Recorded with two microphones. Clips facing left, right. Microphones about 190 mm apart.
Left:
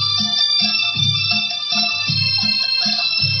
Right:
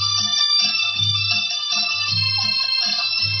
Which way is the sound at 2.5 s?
70° left (ahead or behind).